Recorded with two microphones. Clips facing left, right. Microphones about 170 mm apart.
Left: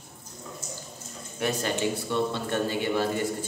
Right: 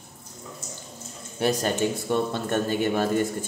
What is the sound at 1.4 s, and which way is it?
Speech, 35° right (ahead or behind).